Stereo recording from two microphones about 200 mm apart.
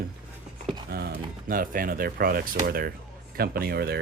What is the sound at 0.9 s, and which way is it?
Speech, 50° right (ahead or behind).